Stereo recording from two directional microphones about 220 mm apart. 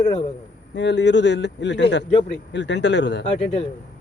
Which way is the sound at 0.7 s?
50° left (ahead or behind).